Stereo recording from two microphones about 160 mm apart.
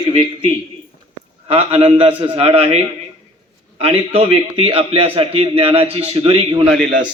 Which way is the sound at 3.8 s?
35° right (ahead or behind).